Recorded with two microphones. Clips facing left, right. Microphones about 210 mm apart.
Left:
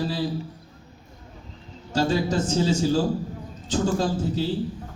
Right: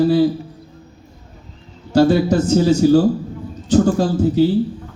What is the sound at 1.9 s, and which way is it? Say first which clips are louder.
Speech: right 10 dB; 60° right (ahead or behind).